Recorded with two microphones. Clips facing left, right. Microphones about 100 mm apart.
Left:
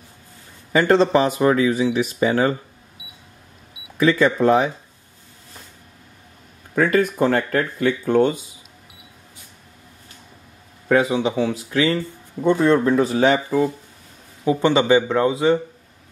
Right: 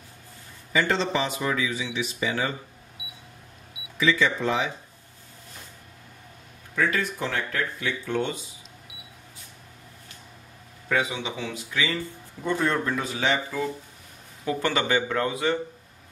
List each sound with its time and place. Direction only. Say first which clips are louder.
0.7 s speech: left 9 dB; 45° left (ahead or behind)
4.0 s speech: left 7 dB; 45° left (ahead or behind)
6.7 s speech: left 8 dB; 50° left (ahead or behind)
10.9 s speech: left 9 dB; 40° left (ahead or behind)
12.4 s speech: left 9 dB; 25° left (ahead or behind); by 13.7 s 40° left (ahead or behind)
14.4 s speech: left 8 dB; 20° left (ahead or behind)